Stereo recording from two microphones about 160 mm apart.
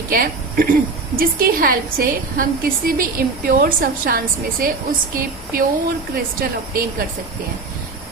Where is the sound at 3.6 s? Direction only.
65° right (ahead or behind).